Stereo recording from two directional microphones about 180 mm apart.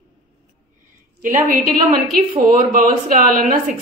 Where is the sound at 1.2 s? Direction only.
50° right (ahead or behind).